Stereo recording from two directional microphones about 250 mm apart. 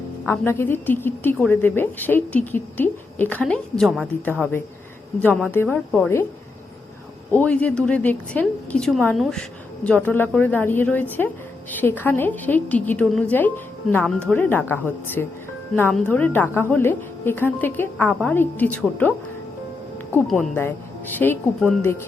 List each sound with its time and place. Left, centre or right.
0.3 s a woman's voice: centre
7.3 s a woman's voice: centre
20.1 s a woman's voice: centre